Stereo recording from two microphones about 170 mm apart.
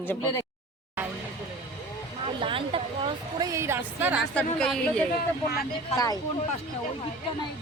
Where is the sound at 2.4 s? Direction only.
30° right (ahead or behind).